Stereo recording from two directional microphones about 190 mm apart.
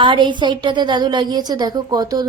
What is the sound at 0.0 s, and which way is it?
A woman's voice, 25° right (ahead or behind).